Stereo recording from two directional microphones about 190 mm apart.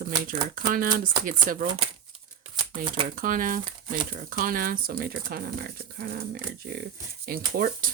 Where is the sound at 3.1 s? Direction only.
45° right (ahead or behind).